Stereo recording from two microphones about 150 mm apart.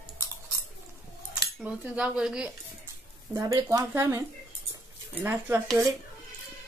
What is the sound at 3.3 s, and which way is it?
Speech, 25° right (ahead or behind).